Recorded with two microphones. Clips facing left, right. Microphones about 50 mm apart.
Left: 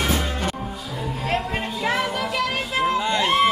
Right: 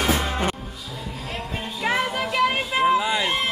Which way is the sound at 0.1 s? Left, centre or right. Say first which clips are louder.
Right 1 dB; right.